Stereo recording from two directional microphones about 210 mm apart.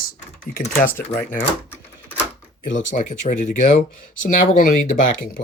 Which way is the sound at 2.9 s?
35° left (ahead or behind).